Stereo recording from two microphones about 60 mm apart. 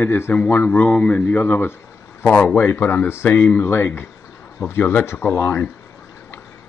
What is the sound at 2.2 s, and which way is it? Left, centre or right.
A man's voice, left.